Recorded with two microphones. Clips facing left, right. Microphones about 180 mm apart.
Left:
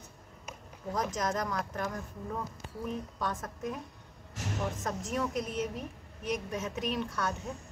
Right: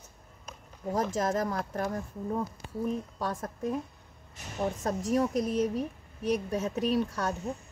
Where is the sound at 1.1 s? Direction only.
30° right (ahead or behind).